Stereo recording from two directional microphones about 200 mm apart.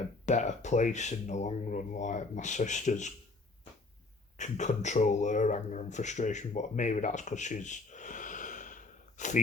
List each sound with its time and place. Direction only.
0.3 s speech: 35° left (ahead or behind)
4.4 s speech: 35° left (ahead or behind)